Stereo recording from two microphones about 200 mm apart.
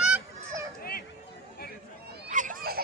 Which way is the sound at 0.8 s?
50° left (ahead or behind).